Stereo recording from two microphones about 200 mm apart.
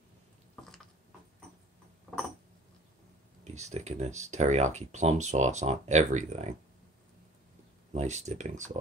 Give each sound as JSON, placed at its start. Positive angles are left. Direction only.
{"t": 3.5, "sound": "speech", "side_deg": -35}
{"t": 7.9, "sound": "speech", "side_deg": -35}